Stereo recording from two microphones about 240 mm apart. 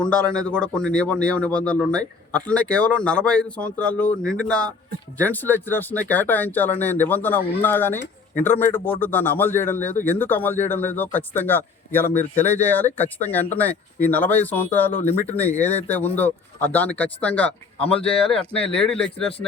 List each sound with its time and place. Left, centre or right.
0.0 s a man's voice: centre